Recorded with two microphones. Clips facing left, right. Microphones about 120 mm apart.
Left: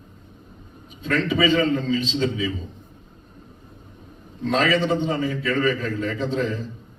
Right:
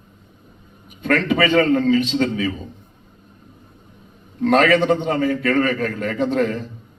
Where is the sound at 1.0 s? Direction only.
55° right (ahead or behind).